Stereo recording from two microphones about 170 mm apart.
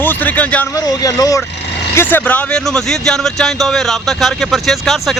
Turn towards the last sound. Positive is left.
turn(degrees=0)  # may be behind; listen again after turning